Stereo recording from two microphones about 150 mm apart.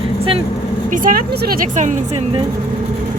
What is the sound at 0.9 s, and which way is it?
A woman's voice, 70° right (ahead or behind).